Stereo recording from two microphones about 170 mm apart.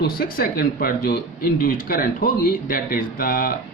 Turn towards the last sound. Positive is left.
turn(degrees=60)  # may be behind; listen again after turning